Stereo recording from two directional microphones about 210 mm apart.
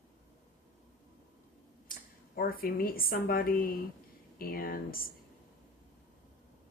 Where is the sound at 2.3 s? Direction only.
45° left (ahead or behind).